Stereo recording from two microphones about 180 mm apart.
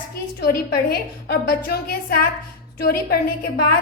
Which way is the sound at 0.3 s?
60° left (ahead or behind).